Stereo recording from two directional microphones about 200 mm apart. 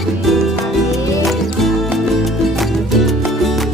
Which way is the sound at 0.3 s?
Centre (ahead or behind).